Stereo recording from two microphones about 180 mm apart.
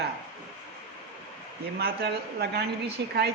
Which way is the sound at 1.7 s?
60° right (ahead or behind).